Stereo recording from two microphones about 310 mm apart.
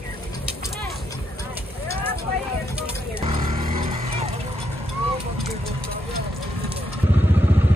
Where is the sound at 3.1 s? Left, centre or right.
Centre.